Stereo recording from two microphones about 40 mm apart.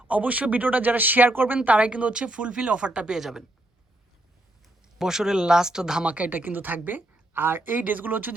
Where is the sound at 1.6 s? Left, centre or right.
Right.